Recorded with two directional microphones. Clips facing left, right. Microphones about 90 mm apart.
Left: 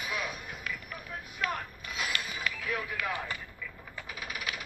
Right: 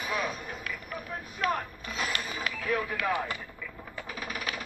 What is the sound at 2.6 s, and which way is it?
Music, 35° right (ahead or behind).